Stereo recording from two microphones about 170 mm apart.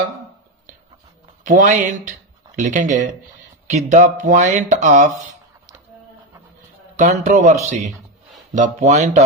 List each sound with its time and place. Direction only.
1.5 s speech: 50° right (ahead or behind)
6.9 s speech: 45° right (ahead or behind)